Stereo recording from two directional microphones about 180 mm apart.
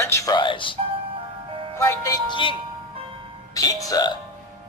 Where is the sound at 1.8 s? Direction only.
15° left (ahead or behind).